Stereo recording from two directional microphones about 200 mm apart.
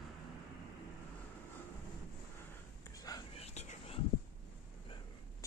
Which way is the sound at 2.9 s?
20° left (ahead or behind).